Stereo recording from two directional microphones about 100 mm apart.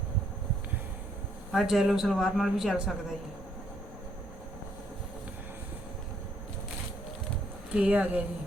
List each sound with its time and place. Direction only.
1.5 s speech: 5° right (ahead or behind)
7.7 s speech: 15° right (ahead or behind)